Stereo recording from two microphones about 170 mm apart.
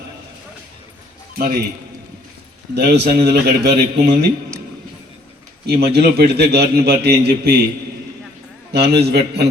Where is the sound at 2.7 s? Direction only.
75° right (ahead or behind).